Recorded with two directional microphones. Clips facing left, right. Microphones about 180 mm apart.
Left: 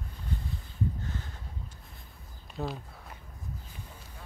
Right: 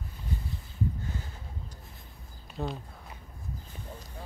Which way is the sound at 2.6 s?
Centre (ahead or behind).